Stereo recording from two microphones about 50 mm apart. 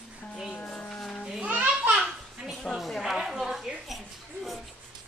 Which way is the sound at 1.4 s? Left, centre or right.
Right.